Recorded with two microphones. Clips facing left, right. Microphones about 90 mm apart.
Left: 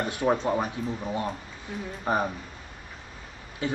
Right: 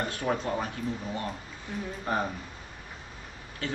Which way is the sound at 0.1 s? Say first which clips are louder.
Left 5 dB; 20° left (ahead or behind).